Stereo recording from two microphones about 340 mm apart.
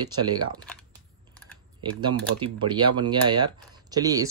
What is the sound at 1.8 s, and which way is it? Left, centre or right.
Speech, centre.